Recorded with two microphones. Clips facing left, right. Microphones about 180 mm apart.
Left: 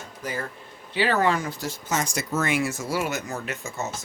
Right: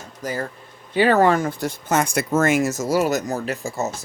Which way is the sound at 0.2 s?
40° right (ahead or behind).